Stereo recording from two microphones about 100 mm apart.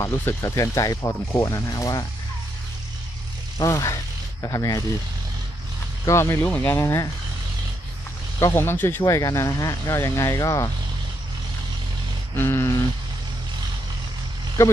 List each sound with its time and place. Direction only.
0.0 s speech: 25° left (ahead or behind)
3.5 s speech: 35° left (ahead or behind)
6.0 s speech: 30° left (ahead or behind)
8.5 s speech: 25° left (ahead or behind)
9.0 s speech: 35° left (ahead or behind)
12.4 s speech: 25° left (ahead or behind)
14.6 s speech: 25° left (ahead or behind)